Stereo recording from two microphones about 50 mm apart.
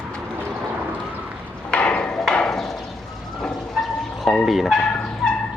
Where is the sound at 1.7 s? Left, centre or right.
Left.